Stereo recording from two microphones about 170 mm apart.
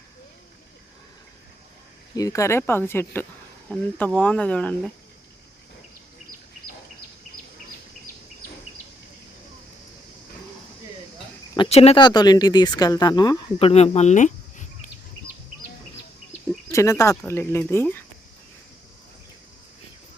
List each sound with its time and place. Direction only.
2.1 s speech: 20° left (ahead or behind)
11.5 s speech: 30° left (ahead or behind)
11.9 s speech: 25° left (ahead or behind); by 14.7 s 45° left (ahead or behind)
16.7 s speech: 20° left (ahead or behind)